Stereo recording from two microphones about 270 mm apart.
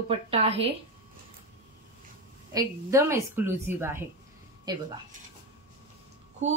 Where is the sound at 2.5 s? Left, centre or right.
Centre.